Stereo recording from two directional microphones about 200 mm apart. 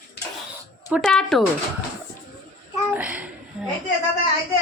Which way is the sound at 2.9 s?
5° right (ahead or behind).